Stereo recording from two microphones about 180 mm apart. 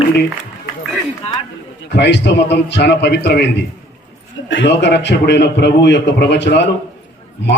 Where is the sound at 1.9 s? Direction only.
75° left (ahead or behind).